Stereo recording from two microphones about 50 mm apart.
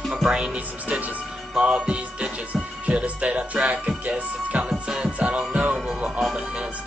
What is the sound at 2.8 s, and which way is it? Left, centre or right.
Music, right.